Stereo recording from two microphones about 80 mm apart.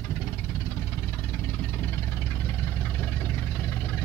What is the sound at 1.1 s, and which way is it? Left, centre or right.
Vehicle, left.